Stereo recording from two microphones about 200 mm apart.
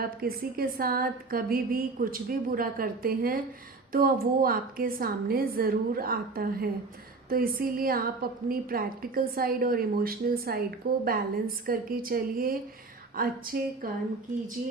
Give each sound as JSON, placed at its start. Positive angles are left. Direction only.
{"t": 0.0, "sound": "a woman's voice", "side_deg": -50}